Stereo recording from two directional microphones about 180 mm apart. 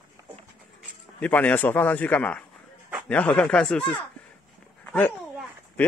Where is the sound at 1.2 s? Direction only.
10° left (ahead or behind).